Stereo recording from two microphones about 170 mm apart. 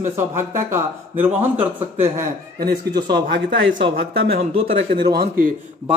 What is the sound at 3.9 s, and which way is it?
Speech, 60° right (ahead or behind).